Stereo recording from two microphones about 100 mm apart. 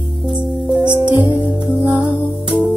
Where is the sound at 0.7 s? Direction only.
50° right (ahead or behind).